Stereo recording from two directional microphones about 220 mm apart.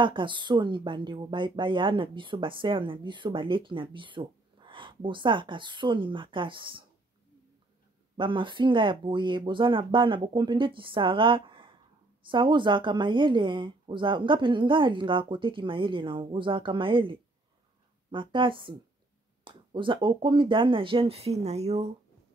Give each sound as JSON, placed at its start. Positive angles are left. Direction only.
{"t": 0.0, "sound": "speech", "side_deg": -20}
{"t": 8.2, "sound": "speech", "side_deg": -20}